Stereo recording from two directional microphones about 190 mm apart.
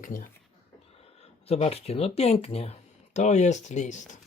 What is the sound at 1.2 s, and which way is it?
Speech, 35° left (ahead or behind).